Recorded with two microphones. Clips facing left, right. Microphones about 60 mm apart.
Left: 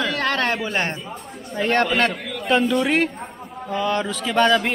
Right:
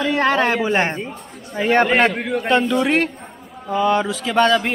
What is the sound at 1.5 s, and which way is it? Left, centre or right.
Speech, centre.